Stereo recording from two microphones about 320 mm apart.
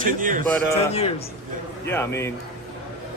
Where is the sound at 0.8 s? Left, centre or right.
Centre.